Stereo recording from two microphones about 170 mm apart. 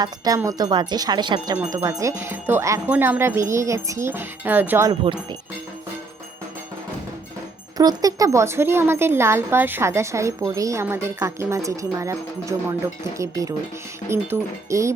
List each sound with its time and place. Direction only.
0.0 s a woman's voice: 20° right (ahead or behind)
7.8 s a woman's voice: 20° right (ahead or behind)